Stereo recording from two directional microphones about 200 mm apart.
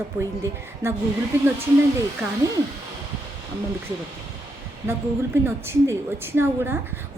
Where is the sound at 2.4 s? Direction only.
15° right (ahead or behind).